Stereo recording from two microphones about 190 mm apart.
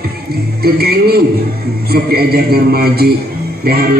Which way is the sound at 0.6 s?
55° right (ahead or behind).